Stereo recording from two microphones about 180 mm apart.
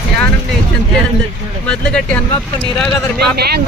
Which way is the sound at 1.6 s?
5° left (ahead or behind).